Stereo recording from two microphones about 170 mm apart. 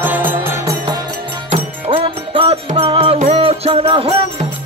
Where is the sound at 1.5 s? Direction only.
30° right (ahead or behind).